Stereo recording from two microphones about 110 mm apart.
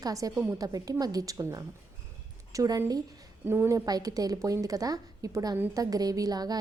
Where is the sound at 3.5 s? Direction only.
20° right (ahead or behind).